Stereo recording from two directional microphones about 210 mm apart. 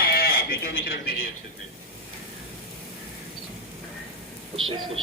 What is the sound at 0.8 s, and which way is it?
Speech, 45° left (ahead or behind).